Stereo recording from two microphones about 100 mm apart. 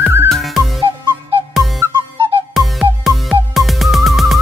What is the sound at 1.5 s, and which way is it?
Whistle, centre (ahead or behind).